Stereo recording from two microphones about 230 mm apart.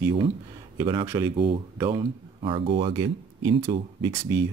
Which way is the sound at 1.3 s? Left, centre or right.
Right.